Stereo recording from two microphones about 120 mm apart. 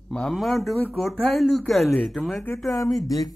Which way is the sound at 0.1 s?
5° left (ahead or behind).